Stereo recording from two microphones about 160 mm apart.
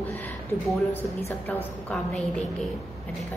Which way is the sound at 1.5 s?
5° left (ahead or behind).